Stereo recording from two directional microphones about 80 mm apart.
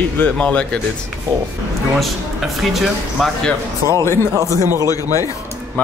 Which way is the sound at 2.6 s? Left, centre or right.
Centre.